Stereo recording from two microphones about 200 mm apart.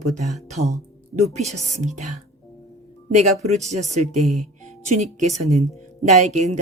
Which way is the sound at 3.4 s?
35° right (ahead or behind).